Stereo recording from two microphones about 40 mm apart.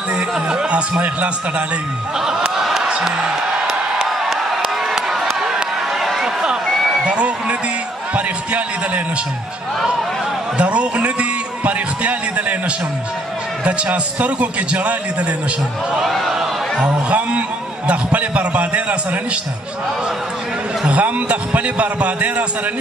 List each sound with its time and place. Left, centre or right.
0.5 s speech: right
0.9 s a man's voice: right
2.1 s a sound: centre
3.0 s music: centre
4.0 s a sound: centre
4.9 s crowd: centre
6.1 s a sound: centre
7.1 s music: right
8.1 s a sound: right
10.6 s a man's voice: right
13.7 s a man's voice: right
16.1 s speech: centre
16.8 s a man's voice: right
20.9 s a man's voice: right